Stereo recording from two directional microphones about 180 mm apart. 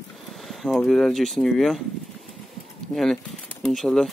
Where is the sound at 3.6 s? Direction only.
Centre (ahead or behind).